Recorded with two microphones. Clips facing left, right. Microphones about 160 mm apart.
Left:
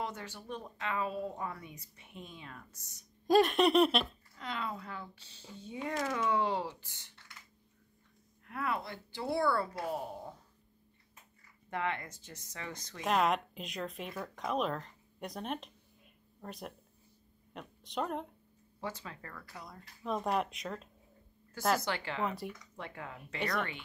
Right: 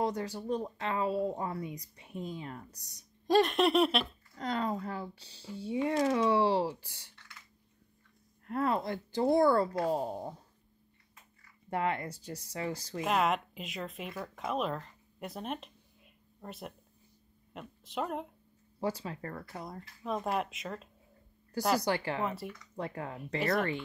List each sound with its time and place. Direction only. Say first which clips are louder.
0.0 s speech: right 8 dB; 35° right (ahead or behind)
3.3 s speech: even; centre (ahead or behind)
4.4 s speech: right 7 dB; 40° right (ahead or behind)
5.4 s speech: right 8 dB; 10° right (ahead or behind)
5.9 s speech: right 5 dB; 30° right (ahead or behind)
8.5 s speech: right 6 dB; 40° right (ahead or behind)
11.7 s speech: right 4 dB; 30° right (ahead or behind)
13.0 s speech: even; centre (ahead or behind)
18.8 s speech: right 7 dB; 35° right (ahead or behind)
20.0 s speech: even; centre (ahead or behind)
21.8 s speech: right 5 dB; 35° right (ahead or behind)
22.2 s speech: right 1 dB; centre (ahead or behind)
22.8 s speech: right 11 dB; 35° right (ahead or behind)